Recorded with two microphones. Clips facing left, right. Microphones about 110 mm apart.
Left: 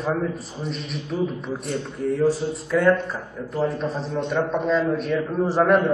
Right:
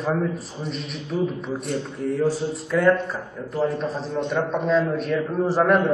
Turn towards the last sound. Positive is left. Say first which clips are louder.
# left 1 dB
turn(degrees=0)  # may be behind; listen again after turning